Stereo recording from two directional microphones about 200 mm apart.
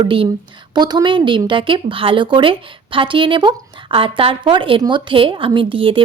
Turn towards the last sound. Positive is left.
turn(degrees=-25)  # may be behind; listen again after turning